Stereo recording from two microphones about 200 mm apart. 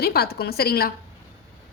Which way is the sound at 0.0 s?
50° left (ahead or behind).